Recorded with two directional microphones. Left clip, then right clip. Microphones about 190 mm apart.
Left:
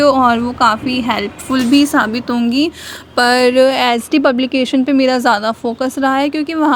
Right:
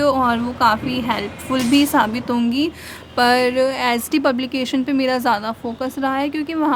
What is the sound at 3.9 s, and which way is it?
A woman's voice, 25° left (ahead or behind).